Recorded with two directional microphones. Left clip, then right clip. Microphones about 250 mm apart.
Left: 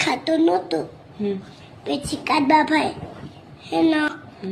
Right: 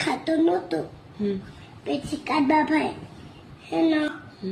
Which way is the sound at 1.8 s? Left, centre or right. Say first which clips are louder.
Left 3 dB; centre.